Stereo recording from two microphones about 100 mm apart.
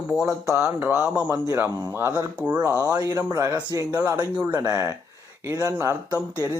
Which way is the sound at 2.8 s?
35° right (ahead or behind).